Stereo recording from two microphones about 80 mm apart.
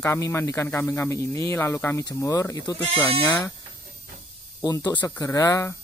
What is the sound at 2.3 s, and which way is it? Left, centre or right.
Speech, left.